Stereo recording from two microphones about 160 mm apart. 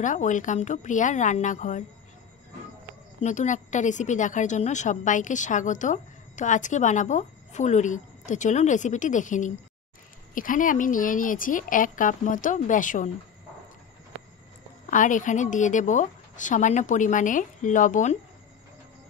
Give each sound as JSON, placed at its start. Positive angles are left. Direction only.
{"t": 0.0, "sound": "a woman's voice", "side_deg": 50}
{"t": 3.2, "sound": "a woman's voice", "side_deg": 50}
{"t": 14.9, "sound": "a woman's voice", "side_deg": 55}